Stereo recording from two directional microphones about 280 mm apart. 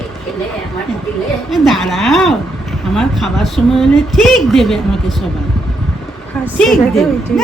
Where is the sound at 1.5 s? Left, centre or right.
Centre.